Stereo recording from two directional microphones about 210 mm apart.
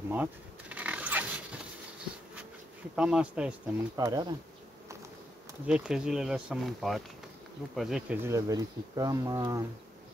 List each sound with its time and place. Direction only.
0.1 s a sound: 10° right (ahead or behind)
3.0 s speech: 5° right (ahead or behind)
5.7 s speech: 5° right (ahead or behind)